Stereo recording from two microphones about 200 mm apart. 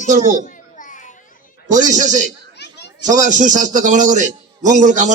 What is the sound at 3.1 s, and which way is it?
A man's voice, 40° right (ahead or behind).